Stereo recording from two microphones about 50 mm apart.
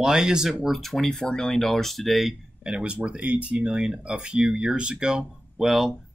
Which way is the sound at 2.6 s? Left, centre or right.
Right.